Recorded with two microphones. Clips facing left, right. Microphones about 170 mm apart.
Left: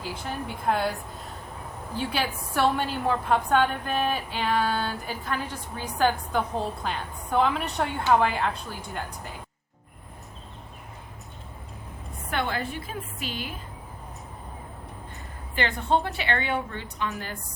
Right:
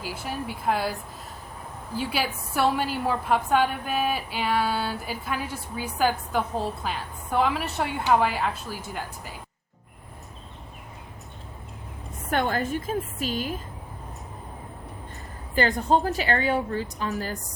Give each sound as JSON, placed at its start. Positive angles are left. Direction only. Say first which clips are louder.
{"t": 0.0, "sound": "a woman's voice", "louder": "right 1 dB", "side_deg": -5}
{"t": 2.0, "sound": "a woman's voice", "louder": "right 1 dB", "side_deg": -5}
{"t": 12.3, "sound": "a woman's voice", "louder": "right 4 dB", "side_deg": -45}
{"t": 15.5, "sound": "a woman's voice", "louder": "right 3 dB", "side_deg": -40}